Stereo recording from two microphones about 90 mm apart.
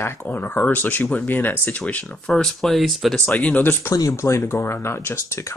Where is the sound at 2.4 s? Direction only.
5° left (ahead or behind).